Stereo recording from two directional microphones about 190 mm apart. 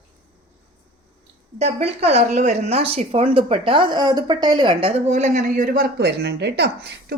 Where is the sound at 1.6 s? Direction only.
35° right (ahead or behind).